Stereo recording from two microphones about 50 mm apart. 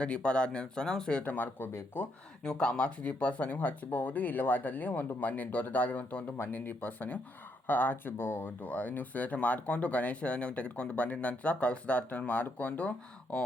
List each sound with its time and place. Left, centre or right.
0.0 s speech: left
1.2 s speech: left
1.5 s speech: left
2.4 s speech: centre; by 8.5 s left
8.6 s speech: left